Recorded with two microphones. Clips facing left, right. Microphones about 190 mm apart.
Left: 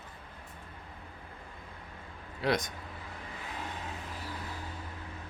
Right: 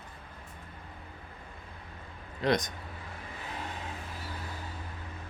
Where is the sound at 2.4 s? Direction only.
5° left (ahead or behind).